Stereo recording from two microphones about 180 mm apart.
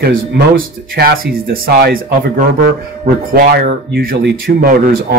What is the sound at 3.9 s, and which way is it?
Speech, 60° right (ahead or behind).